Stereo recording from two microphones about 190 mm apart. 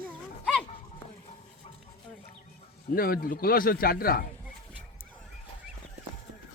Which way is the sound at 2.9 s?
50° left (ahead or behind).